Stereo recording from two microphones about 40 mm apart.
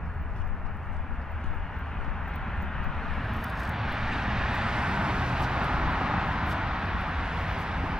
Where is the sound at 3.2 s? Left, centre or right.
Centre.